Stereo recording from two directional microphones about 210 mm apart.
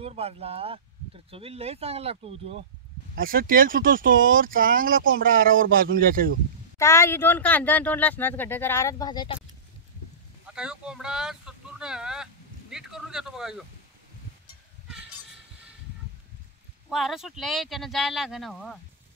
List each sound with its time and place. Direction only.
0.0 s speech: 30° right (ahead or behind)
3.2 s speech: 45° right (ahead or behind)
6.8 s speech: 15° left (ahead or behind)
10.5 s speech: 5° right (ahead or behind)
16.9 s speech: centre (ahead or behind)